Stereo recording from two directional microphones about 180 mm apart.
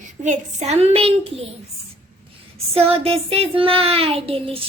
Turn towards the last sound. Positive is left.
turn(degrees=-35)  # may be behind; listen again after turning